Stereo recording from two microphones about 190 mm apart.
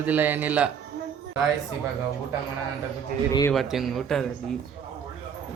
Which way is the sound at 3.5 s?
Centre (ahead or behind).